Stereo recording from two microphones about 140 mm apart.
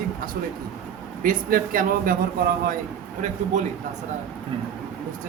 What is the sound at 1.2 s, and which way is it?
Speech, 90° right.